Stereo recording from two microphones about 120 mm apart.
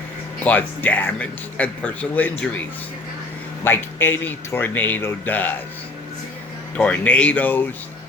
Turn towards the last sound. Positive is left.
turn(degrees=15)  # may be behind; listen again after turning